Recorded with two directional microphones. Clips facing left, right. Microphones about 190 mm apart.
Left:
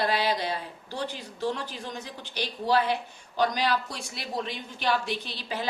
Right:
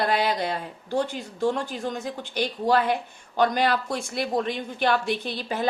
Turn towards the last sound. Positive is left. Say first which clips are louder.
# right 6 dB
turn(degrees=-50)  # may be behind; listen again after turning